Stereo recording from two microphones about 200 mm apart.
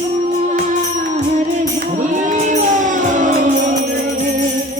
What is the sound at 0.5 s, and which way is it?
Music, 40° right (ahead or behind).